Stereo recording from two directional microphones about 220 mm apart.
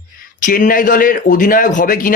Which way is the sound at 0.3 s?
35° left (ahead or behind).